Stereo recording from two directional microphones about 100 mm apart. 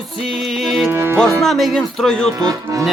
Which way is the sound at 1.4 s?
Centre (ahead or behind).